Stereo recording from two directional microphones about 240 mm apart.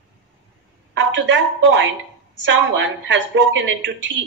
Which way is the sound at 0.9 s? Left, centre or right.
Right.